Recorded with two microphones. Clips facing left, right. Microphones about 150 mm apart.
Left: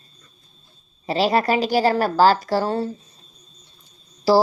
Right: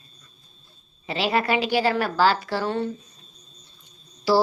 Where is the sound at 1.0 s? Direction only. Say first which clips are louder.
Left 4 dB; 40° left (ahead or behind).